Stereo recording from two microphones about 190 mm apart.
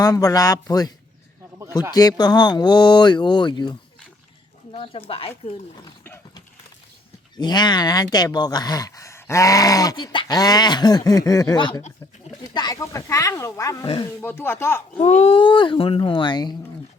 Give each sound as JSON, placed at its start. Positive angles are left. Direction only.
{"t": 0.0, "sound": "speech", "side_deg": 20}
{"t": 5.8, "sound": "dog", "side_deg": 20}
{"t": 7.3, "sound": "speech", "side_deg": 20}
{"t": 14.2, "sound": "speech", "side_deg": 10}
{"t": 14.9, "sound": "speech", "side_deg": 35}